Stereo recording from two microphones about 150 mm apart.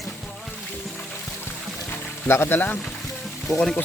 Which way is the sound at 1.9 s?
15° left (ahead or behind).